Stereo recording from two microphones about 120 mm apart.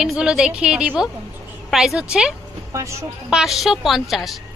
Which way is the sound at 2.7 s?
25° right (ahead or behind).